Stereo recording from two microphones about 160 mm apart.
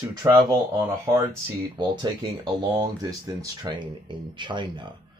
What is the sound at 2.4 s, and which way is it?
Speech, 25° right (ahead or behind).